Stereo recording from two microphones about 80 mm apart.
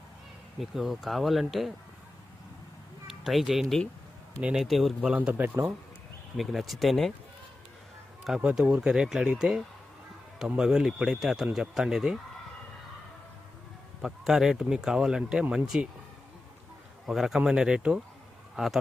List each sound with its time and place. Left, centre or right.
0.6 s speech: centre
3.1 s speech: centre
5.1 s speech: centre
6.3 s speech: centre
8.2 s speech: centre
14.0 s speech: centre
17.1 s a man's voice: centre